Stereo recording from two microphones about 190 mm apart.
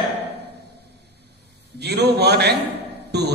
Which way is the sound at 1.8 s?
60° right (ahead or behind).